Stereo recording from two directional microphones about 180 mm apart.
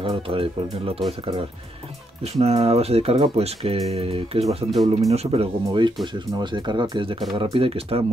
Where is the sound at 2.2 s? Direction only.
35° right (ahead or behind).